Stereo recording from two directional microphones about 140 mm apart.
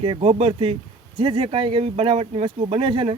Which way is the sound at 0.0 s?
45° right (ahead or behind).